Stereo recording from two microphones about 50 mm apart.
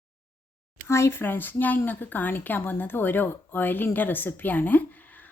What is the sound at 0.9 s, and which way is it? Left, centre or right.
Speech, left.